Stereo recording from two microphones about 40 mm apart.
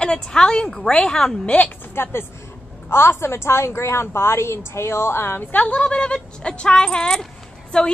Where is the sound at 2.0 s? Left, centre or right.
Left.